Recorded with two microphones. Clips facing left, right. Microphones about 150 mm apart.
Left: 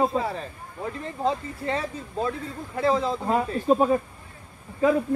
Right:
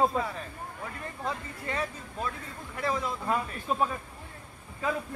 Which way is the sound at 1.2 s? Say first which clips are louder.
Left 10 dB; 30° left (ahead or behind).